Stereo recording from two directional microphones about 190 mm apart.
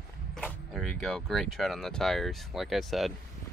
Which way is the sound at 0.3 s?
Centre (ahead or behind).